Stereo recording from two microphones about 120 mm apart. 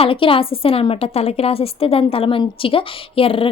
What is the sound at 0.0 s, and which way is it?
A woman's voice, 50° left (ahead or behind).